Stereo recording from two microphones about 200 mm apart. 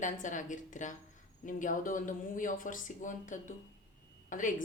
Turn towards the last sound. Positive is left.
turn(degrees=40)  # may be behind; listen again after turning